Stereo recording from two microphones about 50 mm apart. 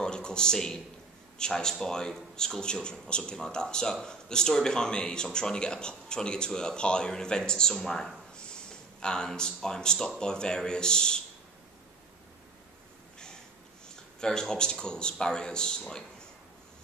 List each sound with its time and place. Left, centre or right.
0.0 s a sound: centre
1.4 s a man's voice: centre
14.2 s a man's voice: centre